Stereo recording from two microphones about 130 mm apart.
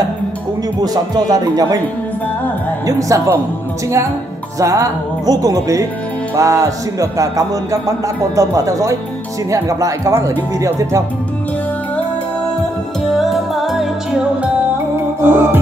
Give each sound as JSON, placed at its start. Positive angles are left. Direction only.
{"t": 0.7, "sound": "speech", "side_deg": -30}
{"t": 2.9, "sound": "speech", "side_deg": -25}
{"t": 4.6, "sound": "speech", "side_deg": -25}
{"t": 13.2, "sound": "music", "side_deg": 0}
{"t": 15.2, "sound": "music", "side_deg": -15}